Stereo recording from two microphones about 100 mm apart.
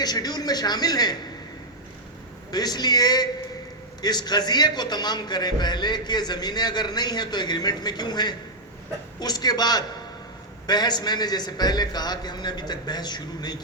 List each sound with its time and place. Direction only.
0.0 s speech: 40° left (ahead or behind)
2.5 s a man's voice: 40° left (ahead or behind)